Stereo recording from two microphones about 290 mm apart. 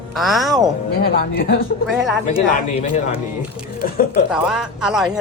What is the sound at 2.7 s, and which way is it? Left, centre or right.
Speech, left.